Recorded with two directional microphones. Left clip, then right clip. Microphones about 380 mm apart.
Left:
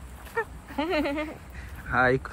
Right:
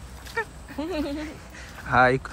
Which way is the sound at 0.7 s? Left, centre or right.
Left.